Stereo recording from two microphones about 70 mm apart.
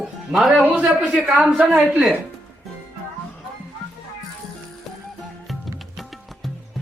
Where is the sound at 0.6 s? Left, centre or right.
Right.